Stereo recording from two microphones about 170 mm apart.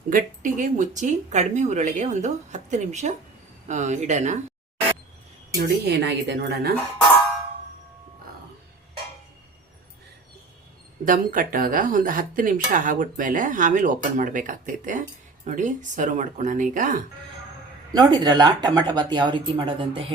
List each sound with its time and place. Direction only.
0.1 s speech: 50° right (ahead or behind)
5.5 s speech: 75° right (ahead or behind)
11.0 s speech: 55° right (ahead or behind)
17.9 s speech: 25° right (ahead or behind)